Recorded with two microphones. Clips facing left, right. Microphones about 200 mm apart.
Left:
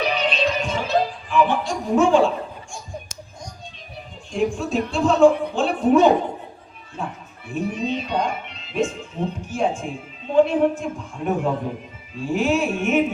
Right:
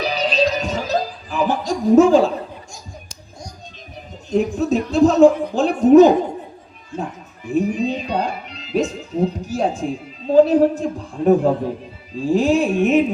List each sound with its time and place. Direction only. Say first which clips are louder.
0.0 s music: right 3 dB; 35° right (ahead or behind)
4.3 s speech: right 5 dB; 40° right (ahead or behind)
7.4 s speech: right 6 dB; 40° right (ahead or behind)